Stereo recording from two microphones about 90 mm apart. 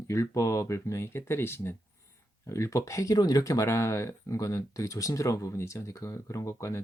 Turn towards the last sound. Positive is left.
turn(degrees=35)  # may be behind; listen again after turning